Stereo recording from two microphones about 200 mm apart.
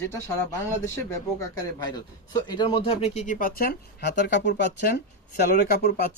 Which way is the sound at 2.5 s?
25° left (ahead or behind).